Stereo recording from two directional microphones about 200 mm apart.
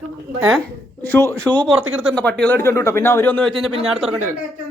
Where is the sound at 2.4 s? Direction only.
10° left (ahead or behind).